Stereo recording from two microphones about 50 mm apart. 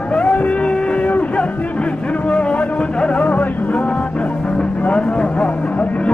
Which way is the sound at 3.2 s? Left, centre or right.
Left.